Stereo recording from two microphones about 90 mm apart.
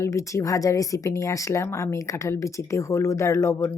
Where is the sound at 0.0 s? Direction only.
35° left (ahead or behind).